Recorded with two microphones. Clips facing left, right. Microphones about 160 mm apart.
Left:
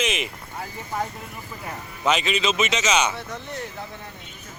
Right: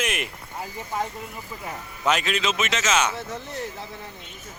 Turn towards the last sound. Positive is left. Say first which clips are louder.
# left 2 dB
turn(degrees=0)  # may be behind; listen again after turning